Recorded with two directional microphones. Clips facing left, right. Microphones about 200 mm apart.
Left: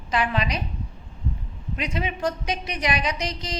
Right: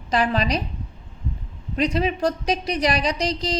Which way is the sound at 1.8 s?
35° right (ahead or behind).